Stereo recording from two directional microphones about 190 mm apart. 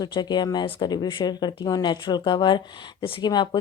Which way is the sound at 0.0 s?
20° left (ahead or behind).